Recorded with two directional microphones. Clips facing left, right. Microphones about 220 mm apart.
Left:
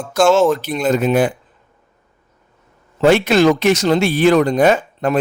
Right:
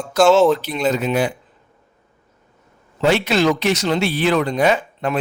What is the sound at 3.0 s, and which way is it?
Speech, 50° left (ahead or behind).